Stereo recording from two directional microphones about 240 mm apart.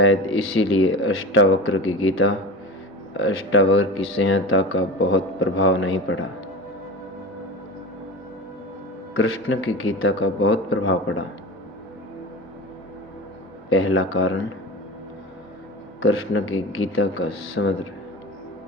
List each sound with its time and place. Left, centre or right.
0.0 s speech: left
9.1 s speech: left
13.7 s speech: left
16.0 s speech: left